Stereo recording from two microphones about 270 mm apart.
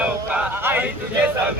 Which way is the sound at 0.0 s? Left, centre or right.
Centre.